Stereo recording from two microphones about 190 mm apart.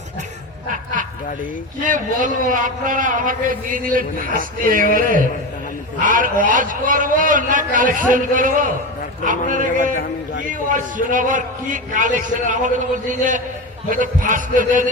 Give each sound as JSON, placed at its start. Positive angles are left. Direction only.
{"t": 1.8, "sound": "a man's voice", "side_deg": -45}